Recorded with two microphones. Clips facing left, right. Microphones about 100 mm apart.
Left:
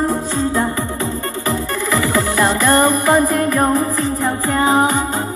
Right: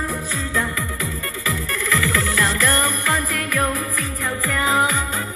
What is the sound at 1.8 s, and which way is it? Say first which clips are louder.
Music: left 4 dB; 25° left (ahead or behind).